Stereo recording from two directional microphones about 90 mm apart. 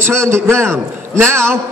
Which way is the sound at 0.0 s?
30° right (ahead or behind).